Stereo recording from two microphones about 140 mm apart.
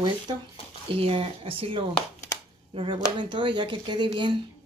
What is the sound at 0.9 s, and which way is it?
Speech, 45° right (ahead or behind).